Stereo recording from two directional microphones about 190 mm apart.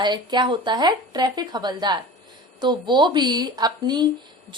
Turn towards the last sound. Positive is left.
turn(degrees=-20)  # may be behind; listen again after turning